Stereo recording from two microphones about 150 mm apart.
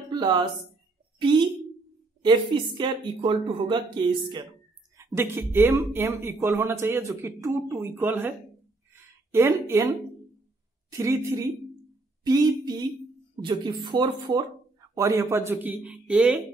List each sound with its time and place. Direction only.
0.1 s speech: 30° right (ahead or behind)
2.8 s speech: 35° right (ahead or behind)
4.9 s speech: 15° right (ahead or behind)
8.9 s a sound: 15° right (ahead or behind)
10.9 s speech: 20° right (ahead or behind)
12.2 s a sound: 25° right (ahead or behind)
13.4 s speech: 30° right (ahead or behind); by 16.3 s 5° right (ahead or behind)